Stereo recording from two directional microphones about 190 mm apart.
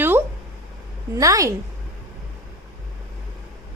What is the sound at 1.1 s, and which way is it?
Speech, 15° right (ahead or behind).